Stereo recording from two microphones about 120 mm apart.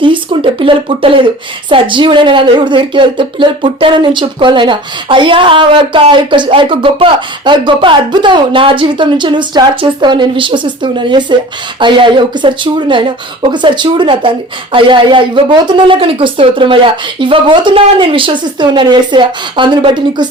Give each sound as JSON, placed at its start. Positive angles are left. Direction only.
{"t": 0.0, "sound": "a woman's voice", "side_deg": -45}